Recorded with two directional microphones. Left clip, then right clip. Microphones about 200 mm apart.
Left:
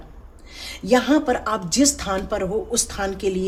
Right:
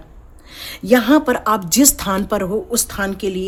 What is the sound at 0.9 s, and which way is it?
A woman's voice, 40° right (ahead or behind).